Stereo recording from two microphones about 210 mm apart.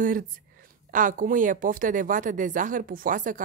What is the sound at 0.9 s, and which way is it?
A woman's voice, 40° right (ahead or behind).